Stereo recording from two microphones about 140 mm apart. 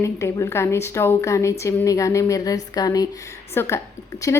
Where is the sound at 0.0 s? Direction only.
20° left (ahead or behind).